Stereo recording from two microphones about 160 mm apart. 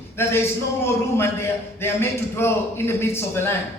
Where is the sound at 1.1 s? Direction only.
15° left (ahead or behind).